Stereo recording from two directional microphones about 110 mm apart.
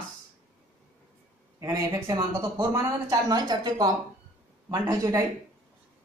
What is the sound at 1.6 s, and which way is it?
Speech, 30° right (ahead or behind).